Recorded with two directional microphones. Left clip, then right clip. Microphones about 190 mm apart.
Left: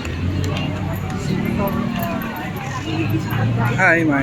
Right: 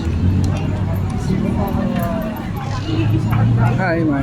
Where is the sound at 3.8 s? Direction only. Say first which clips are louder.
Left 5 dB; centre (ahead or behind).